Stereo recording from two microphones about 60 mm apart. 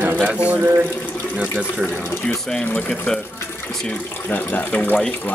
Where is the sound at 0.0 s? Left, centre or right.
Right.